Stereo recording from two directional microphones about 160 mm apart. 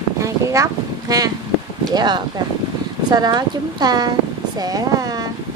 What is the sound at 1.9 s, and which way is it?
Speech, 25° right (ahead or behind).